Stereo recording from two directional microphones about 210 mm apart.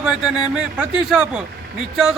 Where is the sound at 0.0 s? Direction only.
5° right (ahead or behind).